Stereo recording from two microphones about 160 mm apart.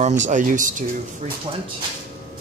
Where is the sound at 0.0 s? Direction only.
50° right (ahead or behind).